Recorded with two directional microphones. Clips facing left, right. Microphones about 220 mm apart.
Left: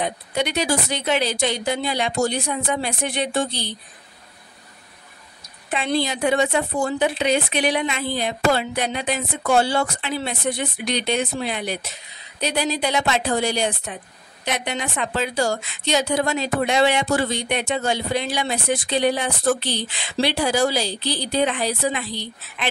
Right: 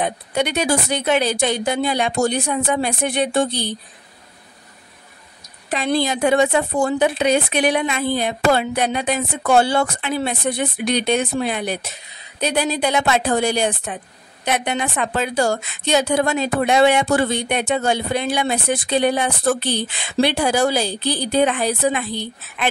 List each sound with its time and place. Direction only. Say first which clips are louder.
0.0 s speech: right 3 dB; 50° right (ahead or behind)
5.9 s speech: right 3 dB; 50° right (ahead or behind)